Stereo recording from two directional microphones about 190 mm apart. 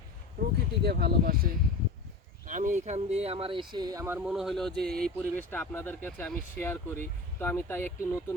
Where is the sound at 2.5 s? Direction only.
40° right (ahead or behind).